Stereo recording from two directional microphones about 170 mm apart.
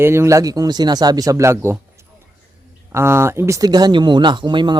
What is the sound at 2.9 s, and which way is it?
Speech, 15° right (ahead or behind).